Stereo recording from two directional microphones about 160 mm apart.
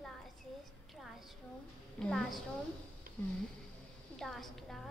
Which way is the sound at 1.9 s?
Centre (ahead or behind).